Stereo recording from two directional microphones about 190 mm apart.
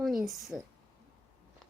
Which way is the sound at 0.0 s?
Centre (ahead or behind).